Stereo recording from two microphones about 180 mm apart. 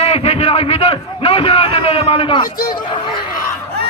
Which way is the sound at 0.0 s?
35° left (ahead or behind).